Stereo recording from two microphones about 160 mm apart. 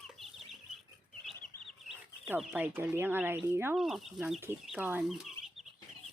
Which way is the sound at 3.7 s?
Centre (ahead or behind).